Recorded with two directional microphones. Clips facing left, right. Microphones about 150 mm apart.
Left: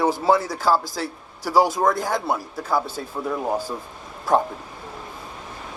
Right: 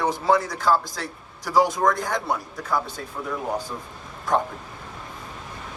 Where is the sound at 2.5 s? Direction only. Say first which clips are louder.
Left 3 dB; 30° left (ahead or behind).